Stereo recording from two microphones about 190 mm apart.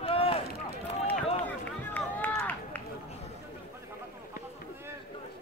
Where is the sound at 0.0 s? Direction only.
30° left (ahead or behind).